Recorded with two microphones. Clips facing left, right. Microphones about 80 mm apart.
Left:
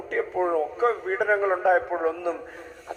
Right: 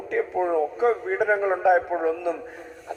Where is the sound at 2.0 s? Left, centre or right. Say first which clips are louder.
Right 1 dB; left.